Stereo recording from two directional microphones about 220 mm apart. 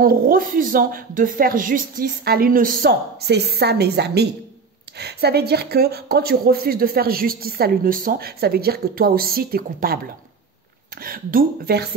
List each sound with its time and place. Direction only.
0.0 s speech: 40° right (ahead or behind)
11.0 s speech: 40° right (ahead or behind)